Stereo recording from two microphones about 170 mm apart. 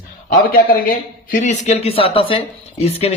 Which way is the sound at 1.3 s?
45° left (ahead or behind).